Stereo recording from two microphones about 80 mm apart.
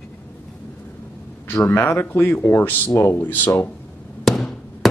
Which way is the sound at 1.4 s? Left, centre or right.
Left.